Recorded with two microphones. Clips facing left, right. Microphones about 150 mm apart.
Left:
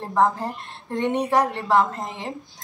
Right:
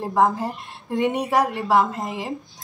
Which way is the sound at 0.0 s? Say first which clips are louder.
Right 1 dB; 10° right (ahead or behind).